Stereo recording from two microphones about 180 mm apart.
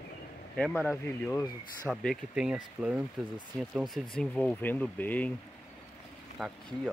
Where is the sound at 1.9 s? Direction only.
Centre (ahead or behind).